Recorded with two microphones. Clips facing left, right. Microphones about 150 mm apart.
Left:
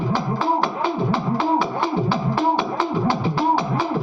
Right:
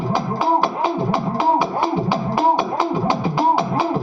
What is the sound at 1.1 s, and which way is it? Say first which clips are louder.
Music: right 2 dB; 15° right (ahead or behind).